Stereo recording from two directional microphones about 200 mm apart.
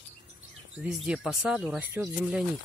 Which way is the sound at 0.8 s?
5° right (ahead or behind).